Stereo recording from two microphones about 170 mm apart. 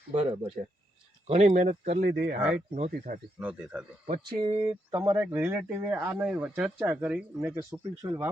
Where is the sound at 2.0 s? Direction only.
65° right (ahead or behind).